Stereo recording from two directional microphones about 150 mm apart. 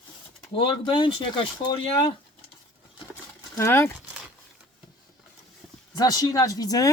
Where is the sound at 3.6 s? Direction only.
15° left (ahead or behind).